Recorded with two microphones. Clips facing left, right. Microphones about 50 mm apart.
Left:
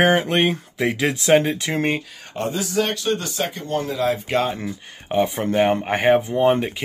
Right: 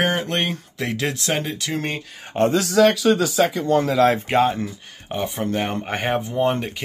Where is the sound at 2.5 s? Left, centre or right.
Right.